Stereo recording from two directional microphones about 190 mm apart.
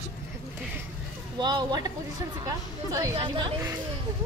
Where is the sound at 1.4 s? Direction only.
20° right (ahead or behind).